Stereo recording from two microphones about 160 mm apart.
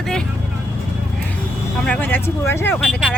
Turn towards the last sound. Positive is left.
turn(degrees=0)  # may be behind; listen again after turning